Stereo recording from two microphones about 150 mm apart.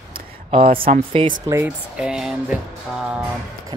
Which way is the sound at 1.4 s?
20° right (ahead or behind).